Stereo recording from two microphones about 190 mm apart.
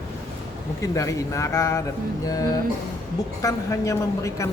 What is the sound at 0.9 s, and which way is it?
Speech, 15° left (ahead or behind).